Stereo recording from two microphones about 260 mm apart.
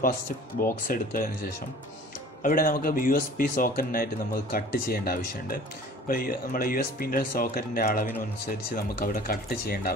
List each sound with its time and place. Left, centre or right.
0.6 s speech: left